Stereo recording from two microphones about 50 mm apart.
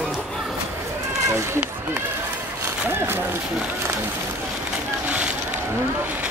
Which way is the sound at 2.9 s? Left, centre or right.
Right.